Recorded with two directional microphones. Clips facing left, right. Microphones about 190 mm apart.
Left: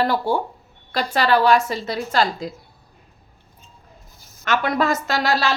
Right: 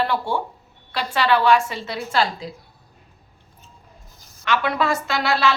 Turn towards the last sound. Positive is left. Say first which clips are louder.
# even
turn(degrees=40)  # may be behind; listen again after turning